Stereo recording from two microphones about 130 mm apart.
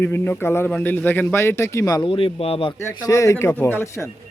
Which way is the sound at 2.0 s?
45° left (ahead or behind).